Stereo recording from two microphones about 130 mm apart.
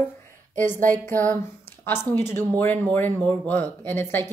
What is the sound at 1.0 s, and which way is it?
A woman's voice, 15° left (ahead or behind).